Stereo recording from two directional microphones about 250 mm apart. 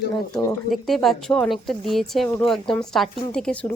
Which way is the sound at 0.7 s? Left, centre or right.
Centre.